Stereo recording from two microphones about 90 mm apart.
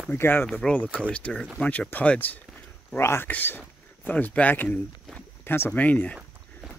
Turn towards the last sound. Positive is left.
turn(degrees=15)  # may be behind; listen again after turning